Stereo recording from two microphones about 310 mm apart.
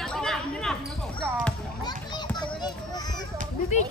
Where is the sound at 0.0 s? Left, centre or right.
Centre.